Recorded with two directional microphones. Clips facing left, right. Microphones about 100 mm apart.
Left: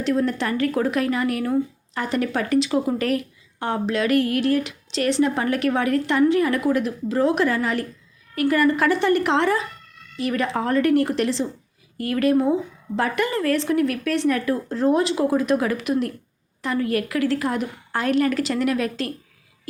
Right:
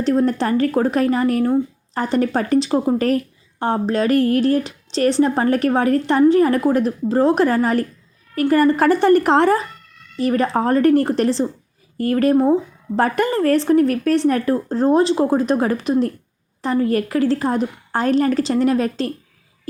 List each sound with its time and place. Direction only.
0.0 s a woman's voice: 35° right (ahead or behind)